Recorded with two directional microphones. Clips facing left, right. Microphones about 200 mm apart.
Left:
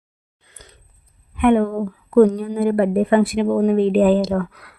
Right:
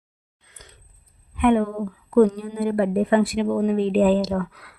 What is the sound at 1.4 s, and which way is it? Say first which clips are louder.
Speech: left 3 dB; 55° left (ahead or behind).